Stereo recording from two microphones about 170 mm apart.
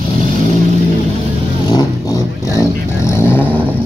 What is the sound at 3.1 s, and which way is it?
Vehicle, 10° left (ahead or behind).